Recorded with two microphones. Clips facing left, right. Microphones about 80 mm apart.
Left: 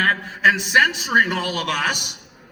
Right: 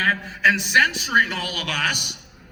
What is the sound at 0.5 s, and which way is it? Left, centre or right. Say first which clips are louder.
A man's voice: left 2 dB; left.